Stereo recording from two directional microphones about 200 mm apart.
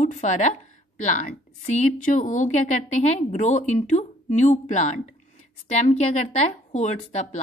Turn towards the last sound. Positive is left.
turn(degrees=35)  # may be behind; listen again after turning